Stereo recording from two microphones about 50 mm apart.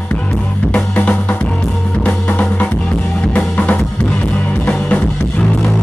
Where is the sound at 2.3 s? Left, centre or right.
Left.